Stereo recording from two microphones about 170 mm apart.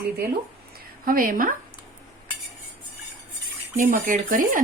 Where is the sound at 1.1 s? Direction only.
55° right (ahead or behind).